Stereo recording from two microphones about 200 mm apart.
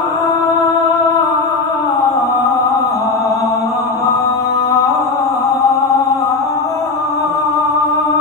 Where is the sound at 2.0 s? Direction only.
15° left (ahead or behind).